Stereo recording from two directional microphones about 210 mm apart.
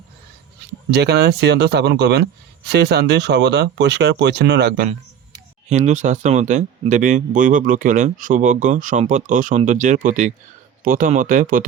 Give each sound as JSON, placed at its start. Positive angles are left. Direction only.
{"t": 0.9, "sound": "speech", "side_deg": -50}
{"t": 5.6, "sound": "speech", "side_deg": -35}